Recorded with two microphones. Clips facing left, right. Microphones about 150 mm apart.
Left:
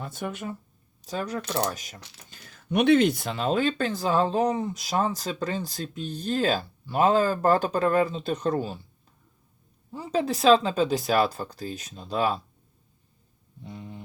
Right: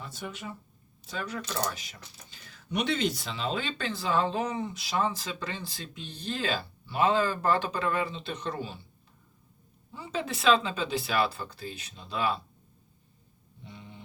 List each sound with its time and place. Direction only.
0.0 s speech: 50° left (ahead or behind)
1.0 s speech: 40° left (ahead or behind)
1.4 s speech: 50° left (ahead or behind)
9.9 s speech: 40° left (ahead or behind)
13.7 s a sound: 45° left (ahead or behind)